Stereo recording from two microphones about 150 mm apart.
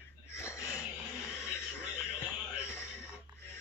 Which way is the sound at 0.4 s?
20° left (ahead or behind).